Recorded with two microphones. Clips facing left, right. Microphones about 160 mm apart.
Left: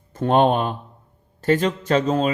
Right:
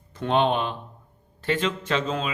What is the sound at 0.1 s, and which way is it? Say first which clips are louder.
A man's voice: left 5 dB; 45° left (ahead or behind).